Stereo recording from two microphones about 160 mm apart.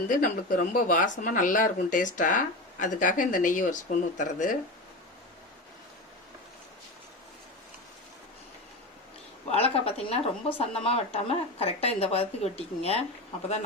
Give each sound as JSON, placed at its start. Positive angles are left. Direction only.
{"t": 0.1, "sound": "speech", "side_deg": 55}
{"t": 9.5, "sound": "a sound", "side_deg": 40}
{"t": 10.6, "sound": "a woman's voice", "side_deg": 40}